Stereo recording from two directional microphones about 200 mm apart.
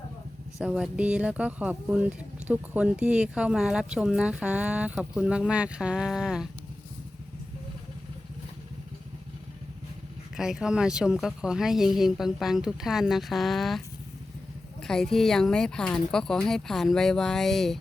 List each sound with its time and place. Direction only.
0.6 s speech: 5° right (ahead or behind)
10.3 s speech: 5° right (ahead or behind)